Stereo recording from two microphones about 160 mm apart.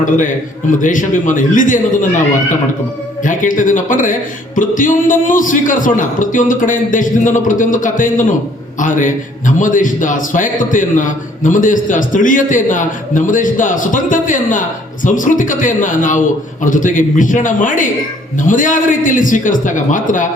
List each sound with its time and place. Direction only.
0.8 s a man's voice: 55° left (ahead or behind)